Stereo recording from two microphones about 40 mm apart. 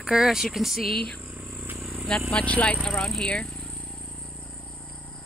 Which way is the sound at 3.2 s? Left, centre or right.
Left.